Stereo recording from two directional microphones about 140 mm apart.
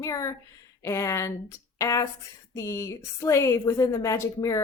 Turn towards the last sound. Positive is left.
turn(degrees=25)  # may be behind; listen again after turning